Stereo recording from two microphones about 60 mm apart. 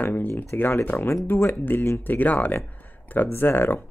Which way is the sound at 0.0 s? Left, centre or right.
Left.